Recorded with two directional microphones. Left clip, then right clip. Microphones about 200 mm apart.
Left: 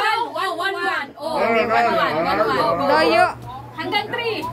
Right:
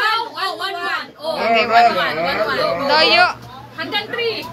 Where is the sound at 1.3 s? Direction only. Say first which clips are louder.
Right 4 dB; 20° left (ahead or behind).